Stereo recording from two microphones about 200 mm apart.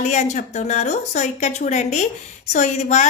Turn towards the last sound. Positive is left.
turn(degrees=35)  # may be behind; listen again after turning